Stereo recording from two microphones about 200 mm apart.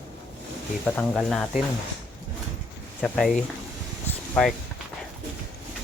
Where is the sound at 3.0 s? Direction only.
5° left (ahead or behind).